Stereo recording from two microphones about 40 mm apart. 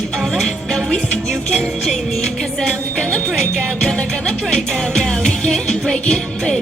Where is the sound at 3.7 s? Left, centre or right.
Centre.